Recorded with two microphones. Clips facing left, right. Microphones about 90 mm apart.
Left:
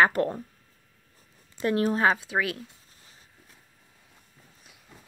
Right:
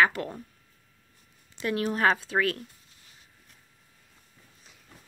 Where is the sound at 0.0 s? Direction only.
35° left (ahead or behind).